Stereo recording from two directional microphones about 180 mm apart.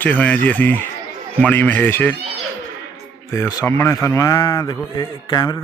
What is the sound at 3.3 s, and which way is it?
Speech, 15° left (ahead or behind).